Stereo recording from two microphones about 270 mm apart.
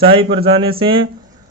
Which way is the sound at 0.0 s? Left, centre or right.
Centre.